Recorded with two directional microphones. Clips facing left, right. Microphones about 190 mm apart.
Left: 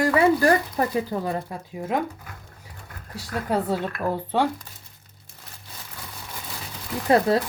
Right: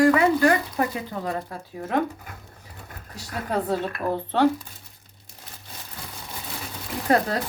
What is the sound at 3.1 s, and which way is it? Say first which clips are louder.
Speech: left 2 dB; 10° left (ahead or behind).